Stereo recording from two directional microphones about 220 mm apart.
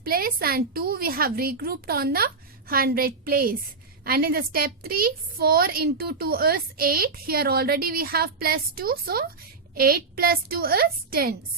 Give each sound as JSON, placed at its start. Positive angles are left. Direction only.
{"t": 0.0, "sound": "a woman's voice", "side_deg": -45}